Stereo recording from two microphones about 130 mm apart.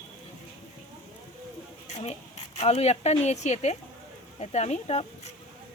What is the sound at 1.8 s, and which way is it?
A woman's voice, 60° left (ahead or behind).